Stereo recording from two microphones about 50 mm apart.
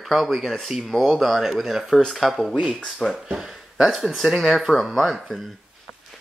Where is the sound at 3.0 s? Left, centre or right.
Centre.